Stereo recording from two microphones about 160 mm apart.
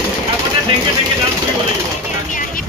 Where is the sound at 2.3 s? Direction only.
55° left (ahead or behind).